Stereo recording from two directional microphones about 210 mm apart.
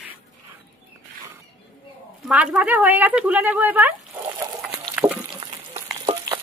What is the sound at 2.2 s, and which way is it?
Speech, 5° right (ahead or behind).